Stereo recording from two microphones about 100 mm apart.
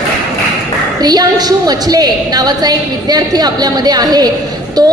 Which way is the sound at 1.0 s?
40° right (ahead or behind).